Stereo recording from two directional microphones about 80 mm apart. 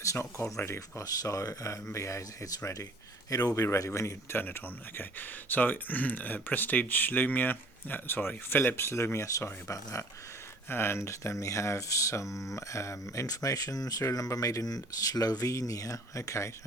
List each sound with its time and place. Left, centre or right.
0.0 s speech: left
1.0 s speech: left
4.4 s speech: left
10.7 s speech: left